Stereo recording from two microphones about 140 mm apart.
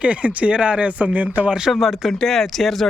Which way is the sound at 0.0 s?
10° right (ahead or behind).